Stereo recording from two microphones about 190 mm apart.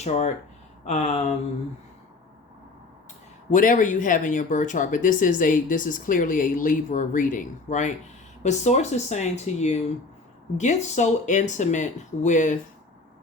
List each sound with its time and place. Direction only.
0.0 s speech: 35° left (ahead or behind)
3.5 s speech: 45° left (ahead or behind)